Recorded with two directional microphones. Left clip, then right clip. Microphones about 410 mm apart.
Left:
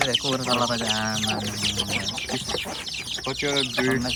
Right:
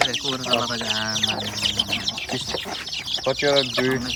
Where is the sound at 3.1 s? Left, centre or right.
Centre.